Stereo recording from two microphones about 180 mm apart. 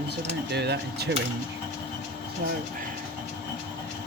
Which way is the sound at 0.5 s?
65° right (ahead or behind).